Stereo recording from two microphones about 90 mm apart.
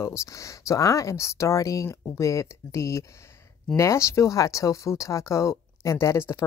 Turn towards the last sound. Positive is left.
turn(degrees=30)  # may be behind; listen again after turning